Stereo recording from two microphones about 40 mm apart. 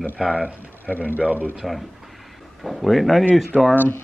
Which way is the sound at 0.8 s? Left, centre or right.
Left.